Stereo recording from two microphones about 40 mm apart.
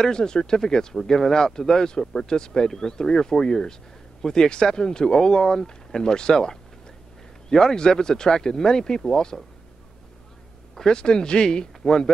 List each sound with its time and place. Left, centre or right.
0.0 s speech: centre
10.7 s speech: centre